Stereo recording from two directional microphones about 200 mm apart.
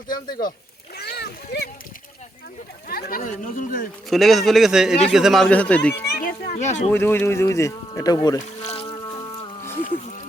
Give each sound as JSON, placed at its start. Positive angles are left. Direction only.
{"t": 0.1, "sound": "speech", "side_deg": 20}
{"t": 0.9, "sound": "splash", "side_deg": 50}
{"t": 2.9, "sound": "speech", "side_deg": 45}
{"t": 4.1, "sound": "speech", "side_deg": 0}
{"t": 6.1, "sound": "a sound", "side_deg": 45}
{"t": 6.9, "sound": "speech", "side_deg": 10}
{"t": 8.6, "sound": "insect", "side_deg": 30}